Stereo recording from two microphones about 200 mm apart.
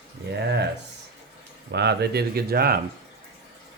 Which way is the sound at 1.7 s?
55° right (ahead or behind).